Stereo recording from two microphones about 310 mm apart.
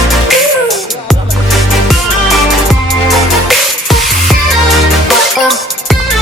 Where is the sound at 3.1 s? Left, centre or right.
Centre.